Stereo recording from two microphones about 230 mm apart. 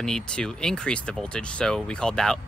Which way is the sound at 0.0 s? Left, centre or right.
Centre.